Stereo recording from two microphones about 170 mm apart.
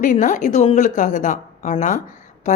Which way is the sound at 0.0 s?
50° left (ahead or behind).